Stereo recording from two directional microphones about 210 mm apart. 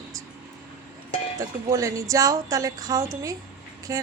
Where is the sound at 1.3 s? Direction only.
15° right (ahead or behind).